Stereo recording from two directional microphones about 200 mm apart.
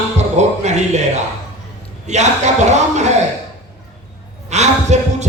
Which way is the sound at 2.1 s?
35° right (ahead or behind).